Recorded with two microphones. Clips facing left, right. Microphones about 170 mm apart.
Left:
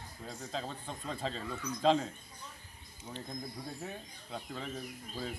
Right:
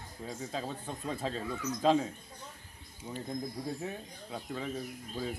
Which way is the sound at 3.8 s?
5° right (ahead or behind).